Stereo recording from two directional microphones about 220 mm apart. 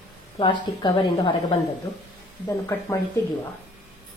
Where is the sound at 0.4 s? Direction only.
20° left (ahead or behind).